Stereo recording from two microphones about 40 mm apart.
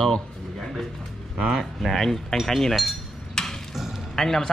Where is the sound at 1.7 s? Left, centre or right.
Centre.